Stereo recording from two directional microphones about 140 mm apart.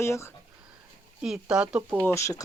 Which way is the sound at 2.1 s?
20° left (ahead or behind).